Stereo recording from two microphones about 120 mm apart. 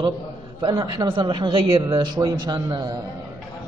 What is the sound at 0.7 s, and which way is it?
A man's voice, 30° right (ahead or behind).